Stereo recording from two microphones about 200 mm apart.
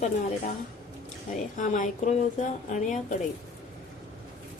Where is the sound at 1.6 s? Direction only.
40° left (ahead or behind).